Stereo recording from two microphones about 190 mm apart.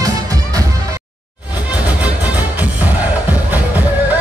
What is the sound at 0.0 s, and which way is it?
Music, 20° right (ahead or behind).